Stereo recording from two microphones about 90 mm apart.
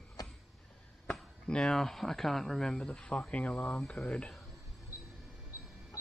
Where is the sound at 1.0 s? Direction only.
10° left (ahead or behind).